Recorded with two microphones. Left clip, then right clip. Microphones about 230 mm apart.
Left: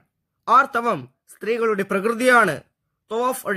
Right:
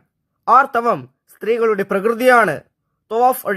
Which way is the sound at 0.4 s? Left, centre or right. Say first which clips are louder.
Right 4 dB; centre.